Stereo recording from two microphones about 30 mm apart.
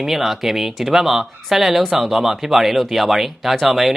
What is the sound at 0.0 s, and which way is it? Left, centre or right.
Speech, centre.